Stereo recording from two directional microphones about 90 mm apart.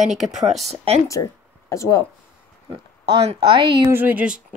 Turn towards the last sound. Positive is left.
turn(degrees=-15)  # may be behind; listen again after turning